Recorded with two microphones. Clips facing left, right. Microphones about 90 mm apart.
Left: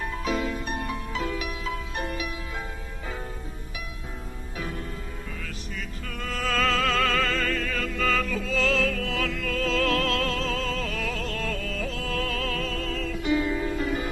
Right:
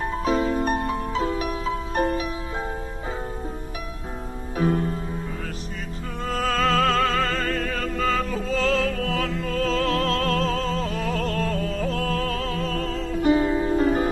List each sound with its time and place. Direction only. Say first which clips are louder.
0.0 s music: right 5 dB; 35° right (ahead or behind)
4.5 s music: right 12 dB; 40° right (ahead or behind)
6.2 s opera: right 3 dB; 40° right (ahead or behind)